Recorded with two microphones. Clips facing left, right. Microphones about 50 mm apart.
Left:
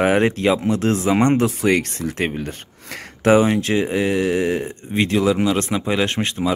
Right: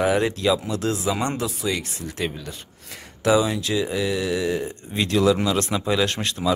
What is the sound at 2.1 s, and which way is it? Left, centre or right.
Speech, left.